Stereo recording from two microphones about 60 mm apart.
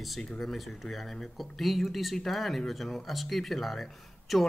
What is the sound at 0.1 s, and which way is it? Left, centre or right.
Speech, centre.